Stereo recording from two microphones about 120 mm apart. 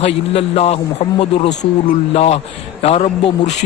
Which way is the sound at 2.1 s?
55° left (ahead or behind).